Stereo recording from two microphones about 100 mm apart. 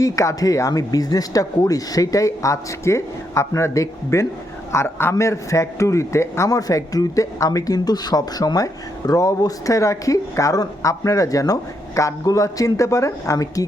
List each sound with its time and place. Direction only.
0.0 s a man's voice: 35° left (ahead or behind)